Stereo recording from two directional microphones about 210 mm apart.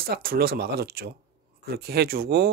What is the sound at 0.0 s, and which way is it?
Speech, 45° right (ahead or behind).